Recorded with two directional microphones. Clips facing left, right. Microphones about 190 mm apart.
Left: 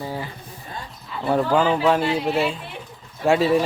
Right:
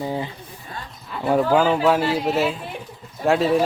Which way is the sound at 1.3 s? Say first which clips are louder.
Right 1 dB; 5° right (ahead or behind).